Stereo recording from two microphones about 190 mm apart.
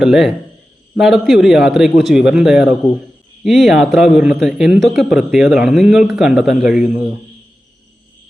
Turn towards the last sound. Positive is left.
turn(degrees=0)  # may be behind; listen again after turning